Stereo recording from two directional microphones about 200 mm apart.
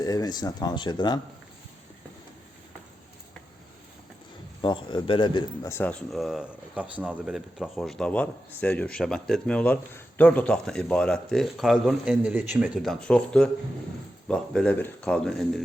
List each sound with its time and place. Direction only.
0.0 s speech: 20° left (ahead or behind)
4.6 s speech: 25° left (ahead or behind); by 15.6 s centre (ahead or behind)